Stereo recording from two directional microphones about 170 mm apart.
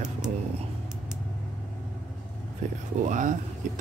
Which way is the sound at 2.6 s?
45° right (ahead or behind).